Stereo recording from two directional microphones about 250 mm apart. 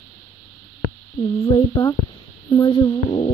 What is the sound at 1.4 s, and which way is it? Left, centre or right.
Speech, centre.